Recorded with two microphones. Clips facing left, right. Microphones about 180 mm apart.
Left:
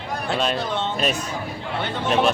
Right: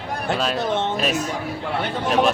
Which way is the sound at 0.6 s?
20° right (ahead or behind).